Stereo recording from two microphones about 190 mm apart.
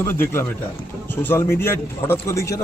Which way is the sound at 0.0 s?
10° left (ahead or behind).